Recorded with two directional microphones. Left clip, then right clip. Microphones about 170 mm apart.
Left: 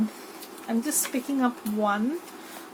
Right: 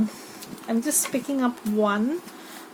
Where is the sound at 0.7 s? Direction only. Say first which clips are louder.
Right 3 dB; 70° right (ahead or behind).